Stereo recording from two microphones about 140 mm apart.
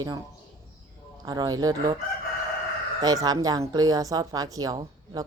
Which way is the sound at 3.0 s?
25° right (ahead or behind).